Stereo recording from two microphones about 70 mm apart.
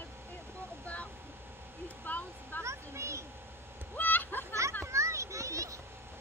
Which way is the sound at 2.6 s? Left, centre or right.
Right.